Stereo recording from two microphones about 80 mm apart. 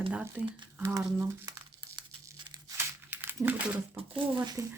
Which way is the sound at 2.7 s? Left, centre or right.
Right.